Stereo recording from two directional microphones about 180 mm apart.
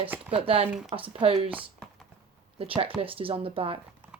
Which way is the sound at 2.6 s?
30° right (ahead or behind).